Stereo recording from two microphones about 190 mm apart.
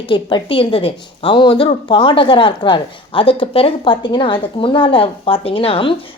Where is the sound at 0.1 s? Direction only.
25° left (ahead or behind).